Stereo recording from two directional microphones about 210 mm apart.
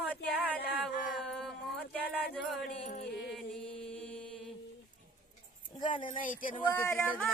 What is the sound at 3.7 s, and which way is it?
Mantra, 5° left (ahead or behind).